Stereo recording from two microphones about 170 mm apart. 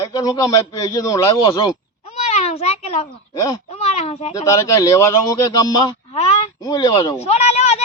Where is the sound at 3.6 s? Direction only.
35° left (ahead or behind).